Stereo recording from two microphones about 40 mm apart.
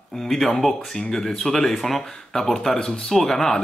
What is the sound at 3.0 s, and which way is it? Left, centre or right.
Speech, centre.